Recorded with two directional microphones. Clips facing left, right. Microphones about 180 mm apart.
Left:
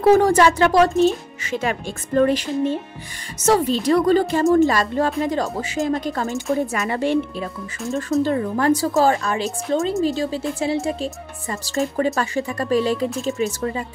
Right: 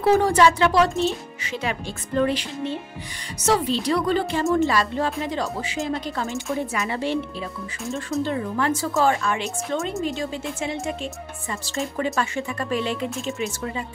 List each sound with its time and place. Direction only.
0.0 s speech: 45° left (ahead or behind)
7.8 s speech: centre (ahead or behind)
8.2 s speech: 40° left (ahead or behind)
13.1 s speech: centre (ahead or behind)
13.4 s speech: 40° left (ahead or behind)